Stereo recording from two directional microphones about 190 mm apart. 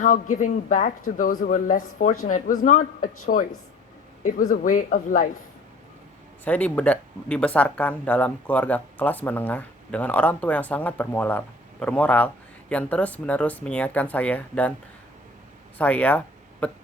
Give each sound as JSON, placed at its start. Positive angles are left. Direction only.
{"t": 0.0, "sound": "speech", "side_deg": 45}
{"t": 6.4, "sound": "speech", "side_deg": 10}
{"t": 15.8, "sound": "speech", "side_deg": 5}